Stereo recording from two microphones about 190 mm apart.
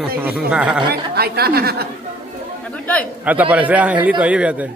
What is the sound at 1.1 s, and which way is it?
Speech, 55° right (ahead or behind).